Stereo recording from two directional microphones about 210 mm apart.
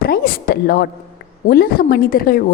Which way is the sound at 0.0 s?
45° left (ahead or behind).